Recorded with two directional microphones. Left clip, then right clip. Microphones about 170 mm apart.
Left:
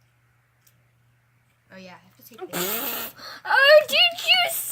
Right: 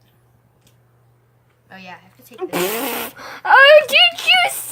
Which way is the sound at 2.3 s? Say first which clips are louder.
Right 8 dB; 35° right (ahead or behind).